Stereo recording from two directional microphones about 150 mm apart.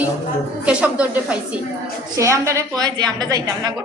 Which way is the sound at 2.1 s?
20° right (ahead or behind).